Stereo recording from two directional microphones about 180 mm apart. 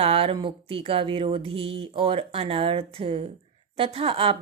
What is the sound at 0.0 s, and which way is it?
A woman's voice, 30° right (ahead or behind).